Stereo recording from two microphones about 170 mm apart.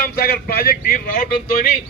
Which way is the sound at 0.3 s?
60° left (ahead or behind).